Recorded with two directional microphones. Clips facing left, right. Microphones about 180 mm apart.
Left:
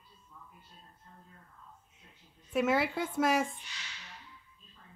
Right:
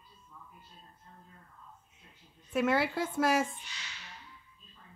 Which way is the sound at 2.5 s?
Centre (ahead or behind).